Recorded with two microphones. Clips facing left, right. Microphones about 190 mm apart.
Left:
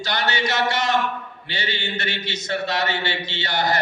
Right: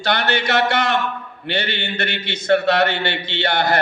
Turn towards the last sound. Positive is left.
turn(degrees=-60)  # may be behind; listen again after turning